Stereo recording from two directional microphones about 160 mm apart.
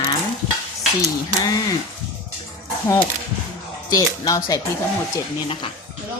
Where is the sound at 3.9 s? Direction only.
20° left (ahead or behind).